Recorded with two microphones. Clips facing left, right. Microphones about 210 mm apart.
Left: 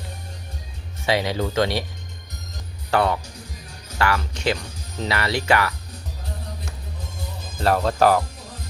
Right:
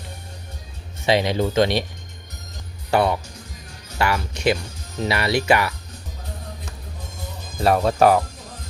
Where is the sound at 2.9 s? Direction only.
15° right (ahead or behind).